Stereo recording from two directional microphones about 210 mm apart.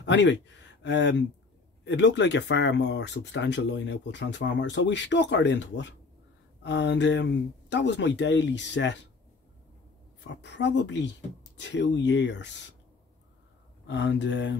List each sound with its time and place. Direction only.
0.0 s speech: 60° left (ahead or behind)
10.2 s speech: 55° left (ahead or behind)
13.8 s speech: 55° left (ahead or behind)